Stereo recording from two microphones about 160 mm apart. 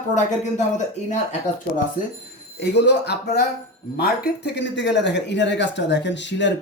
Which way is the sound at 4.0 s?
70° left (ahead or behind).